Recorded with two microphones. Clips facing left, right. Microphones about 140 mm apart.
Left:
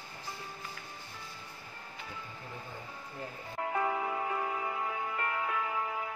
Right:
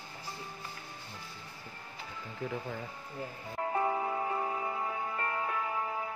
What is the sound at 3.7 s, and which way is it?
Music, 30° right (ahead or behind).